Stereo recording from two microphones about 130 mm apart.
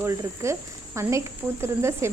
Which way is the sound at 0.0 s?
20° right (ahead or behind).